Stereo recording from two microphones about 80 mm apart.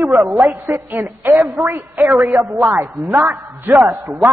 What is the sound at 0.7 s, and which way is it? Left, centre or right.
Speech, right.